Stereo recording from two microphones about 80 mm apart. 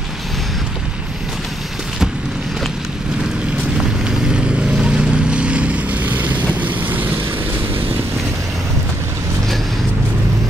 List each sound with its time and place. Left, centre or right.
4.3 s vehicle: centre